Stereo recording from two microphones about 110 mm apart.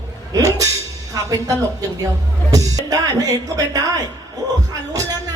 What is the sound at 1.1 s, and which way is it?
A man's voice, 30° right (ahead or behind).